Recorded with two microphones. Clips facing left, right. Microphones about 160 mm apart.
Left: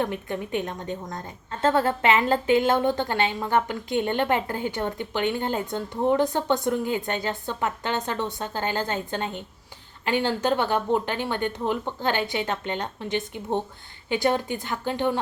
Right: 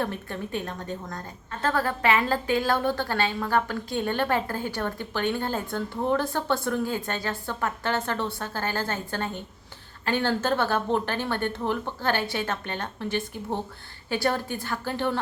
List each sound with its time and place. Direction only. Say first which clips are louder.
0.0 s a woman's voice: left 3 dB; 20° left (ahead or behind)